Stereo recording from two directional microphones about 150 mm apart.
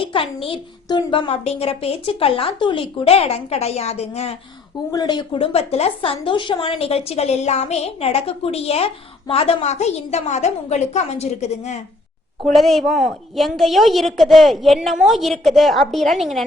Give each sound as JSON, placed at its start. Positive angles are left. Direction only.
{"t": 0.0, "sound": "a woman's voice", "side_deg": 35}
{"t": 4.9, "sound": "a woman's voice", "side_deg": 25}
{"t": 12.5, "sound": "a woman's voice", "side_deg": 0}